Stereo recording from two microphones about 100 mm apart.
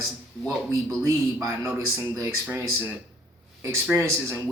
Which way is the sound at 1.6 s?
20° right (ahead or behind).